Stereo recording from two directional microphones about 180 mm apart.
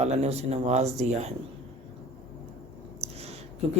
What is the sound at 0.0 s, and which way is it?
Speech, 35° right (ahead or behind).